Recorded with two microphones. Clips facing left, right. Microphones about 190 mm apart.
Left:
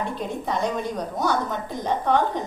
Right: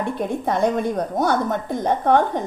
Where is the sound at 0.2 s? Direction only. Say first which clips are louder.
Right 8 dB; 55° right (ahead or behind).